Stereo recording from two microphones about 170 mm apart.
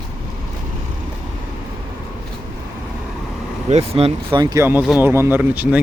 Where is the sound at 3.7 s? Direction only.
35° right (ahead or behind).